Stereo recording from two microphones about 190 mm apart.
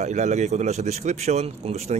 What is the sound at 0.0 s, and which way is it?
Speech, 35° right (ahead or behind).